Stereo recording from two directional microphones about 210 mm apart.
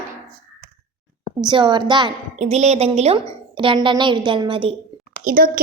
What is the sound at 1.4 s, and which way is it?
Speech, 20° right (ahead or behind).